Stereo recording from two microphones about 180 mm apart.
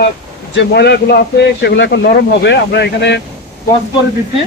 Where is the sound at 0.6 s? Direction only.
70° left (ahead or behind).